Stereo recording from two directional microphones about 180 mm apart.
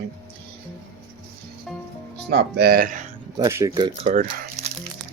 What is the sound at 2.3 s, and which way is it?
Speech, 65° right (ahead or behind).